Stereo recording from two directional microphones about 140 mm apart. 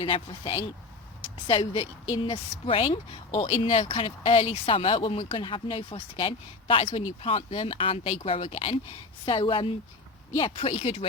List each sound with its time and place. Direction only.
0.0 s speech: 40° left (ahead or behind)